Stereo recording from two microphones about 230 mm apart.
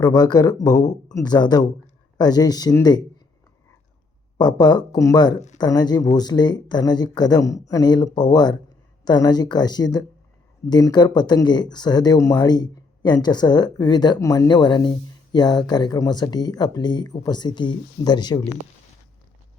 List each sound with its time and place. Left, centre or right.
0.0 s speech: centre
4.4 s speech: centre